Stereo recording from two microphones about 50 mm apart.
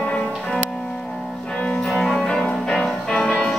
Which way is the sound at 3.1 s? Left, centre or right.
Centre.